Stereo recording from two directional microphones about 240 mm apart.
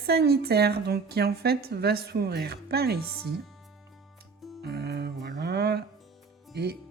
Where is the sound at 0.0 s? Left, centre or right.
Right.